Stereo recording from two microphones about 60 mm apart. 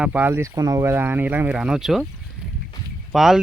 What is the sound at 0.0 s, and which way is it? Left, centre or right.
Speech, right.